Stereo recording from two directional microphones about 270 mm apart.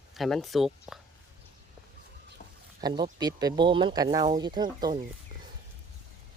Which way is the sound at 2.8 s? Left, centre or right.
Centre.